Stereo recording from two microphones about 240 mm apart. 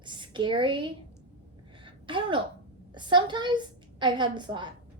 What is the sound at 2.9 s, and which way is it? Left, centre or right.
A woman's voice, centre.